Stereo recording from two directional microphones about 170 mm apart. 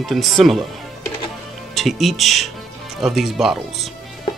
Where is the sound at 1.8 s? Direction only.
Centre (ahead or behind).